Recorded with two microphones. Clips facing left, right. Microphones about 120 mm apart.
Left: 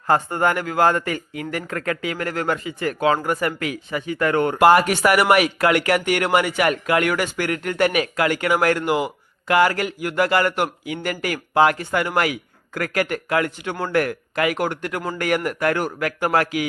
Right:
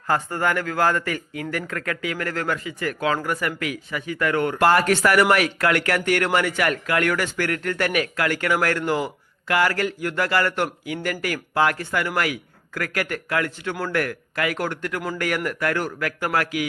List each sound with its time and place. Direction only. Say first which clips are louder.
0.1 s speech: left 3 dB; 25° left (ahead or behind)
4.5 s speech: left 4 dB; 15° left (ahead or behind)